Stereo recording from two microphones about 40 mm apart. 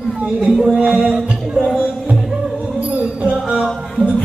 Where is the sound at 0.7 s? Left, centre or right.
Right.